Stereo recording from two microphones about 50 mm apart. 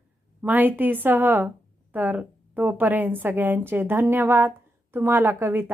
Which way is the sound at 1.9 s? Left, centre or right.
Right.